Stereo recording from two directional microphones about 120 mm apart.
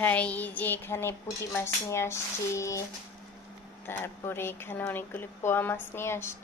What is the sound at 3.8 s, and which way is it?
Speech, 20° left (ahead or behind).